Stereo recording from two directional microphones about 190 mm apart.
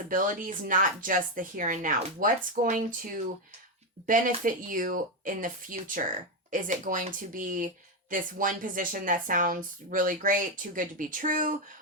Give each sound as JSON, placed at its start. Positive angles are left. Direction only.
{"t": 0.1, "sound": "speech", "side_deg": -45}